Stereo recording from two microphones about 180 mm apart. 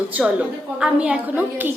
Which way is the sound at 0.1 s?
10° right (ahead or behind).